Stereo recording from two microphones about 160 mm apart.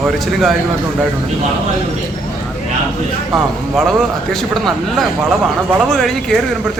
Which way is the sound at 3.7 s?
Centre (ahead or behind).